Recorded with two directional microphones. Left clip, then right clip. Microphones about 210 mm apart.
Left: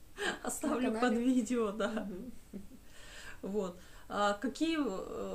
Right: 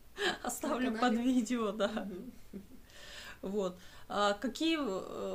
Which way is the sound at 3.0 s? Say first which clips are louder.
Right 1 dB; 20° right (ahead or behind).